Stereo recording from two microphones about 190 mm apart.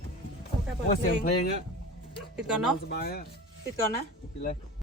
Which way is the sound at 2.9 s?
55° left (ahead or behind).